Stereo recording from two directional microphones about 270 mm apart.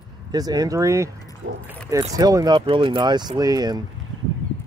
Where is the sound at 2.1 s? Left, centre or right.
Centre.